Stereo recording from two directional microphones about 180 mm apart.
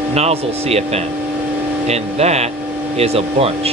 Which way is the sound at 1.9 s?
35° right (ahead or behind).